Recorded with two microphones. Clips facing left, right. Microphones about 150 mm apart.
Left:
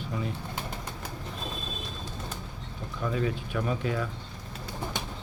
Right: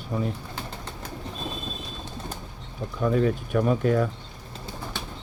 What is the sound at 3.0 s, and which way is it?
Speech, 45° right (ahead or behind).